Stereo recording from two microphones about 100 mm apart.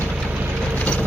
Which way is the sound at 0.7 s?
15° left (ahead or behind).